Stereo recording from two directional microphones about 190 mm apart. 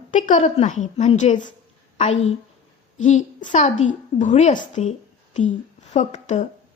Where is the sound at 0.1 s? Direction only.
40° left (ahead or behind).